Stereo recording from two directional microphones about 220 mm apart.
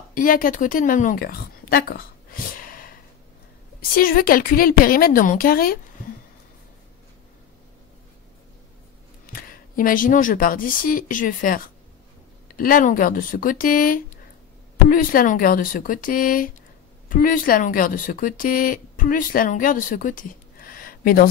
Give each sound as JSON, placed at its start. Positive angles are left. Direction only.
{"t": 0.1, "sound": "a woman's voice", "side_deg": 40}
{"t": 9.2, "sound": "a woman's voice", "side_deg": 40}